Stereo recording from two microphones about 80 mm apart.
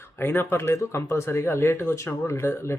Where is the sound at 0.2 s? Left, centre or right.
Left.